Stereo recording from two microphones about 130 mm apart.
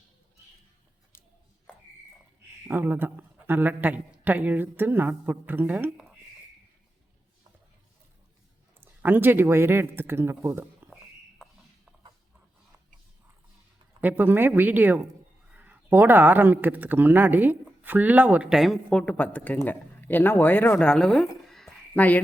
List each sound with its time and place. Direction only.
2.6 s speech: 15° right (ahead or behind)
8.8 s speech: 15° right (ahead or behind)
14.0 s speech: 15° right (ahead or behind); by 22.2 s 10° left (ahead or behind)